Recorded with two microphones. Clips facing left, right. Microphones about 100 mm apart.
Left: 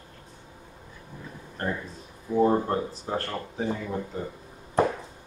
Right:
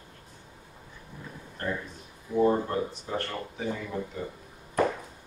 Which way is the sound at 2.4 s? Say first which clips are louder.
Left 1 dB; 35° left (ahead or behind).